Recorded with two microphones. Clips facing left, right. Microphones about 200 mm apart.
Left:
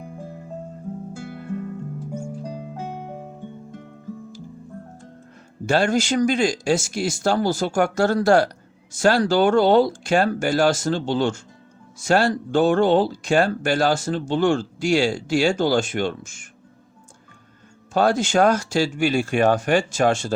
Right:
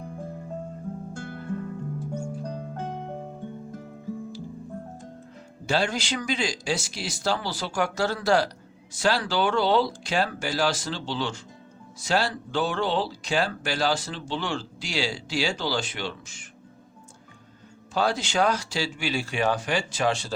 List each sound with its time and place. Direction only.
0.0 s music: 5° left (ahead or behind)
5.6 s speech: 50° left (ahead or behind)
17.9 s speech: 50° left (ahead or behind)